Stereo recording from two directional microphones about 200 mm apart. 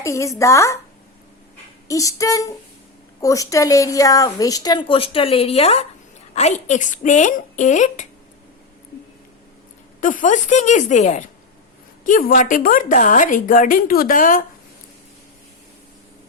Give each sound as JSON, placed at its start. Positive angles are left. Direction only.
{"t": 0.0, "sound": "speech", "side_deg": 15}
{"t": 1.9, "sound": "a woman's voice", "side_deg": 15}
{"t": 10.0, "sound": "a woman's voice", "side_deg": 40}